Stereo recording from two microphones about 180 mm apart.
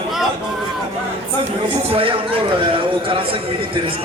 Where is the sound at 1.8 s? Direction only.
30° right (ahead or behind).